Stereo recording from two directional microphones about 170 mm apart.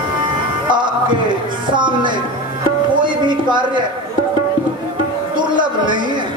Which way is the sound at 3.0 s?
25° right (ahead or behind).